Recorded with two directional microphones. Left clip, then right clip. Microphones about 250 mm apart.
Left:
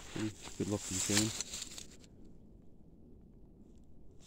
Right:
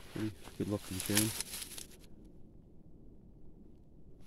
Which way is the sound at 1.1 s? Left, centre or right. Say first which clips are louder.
Right 1 dB; centre.